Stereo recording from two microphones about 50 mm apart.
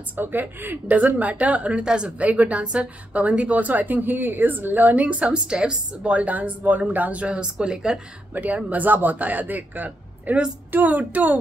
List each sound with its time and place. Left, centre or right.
0.1 s speech: right; by 2.1 s centre
2.1 s a woman's voice: right
8.3 s speech: right